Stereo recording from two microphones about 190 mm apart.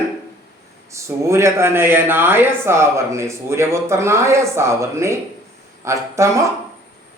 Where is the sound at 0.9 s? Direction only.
15° right (ahead or behind).